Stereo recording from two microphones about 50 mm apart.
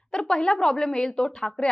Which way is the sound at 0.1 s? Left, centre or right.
Centre.